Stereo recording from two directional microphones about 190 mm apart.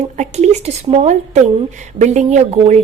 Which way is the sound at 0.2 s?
35° right (ahead or behind).